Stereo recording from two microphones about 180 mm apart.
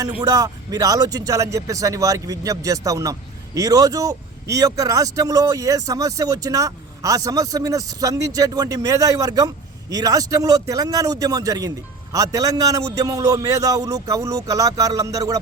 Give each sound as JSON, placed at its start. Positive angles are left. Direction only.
{"t": 0.0, "sound": "speech", "side_deg": -20}